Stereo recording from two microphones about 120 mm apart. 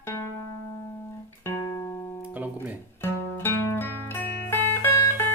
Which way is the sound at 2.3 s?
15° right (ahead or behind).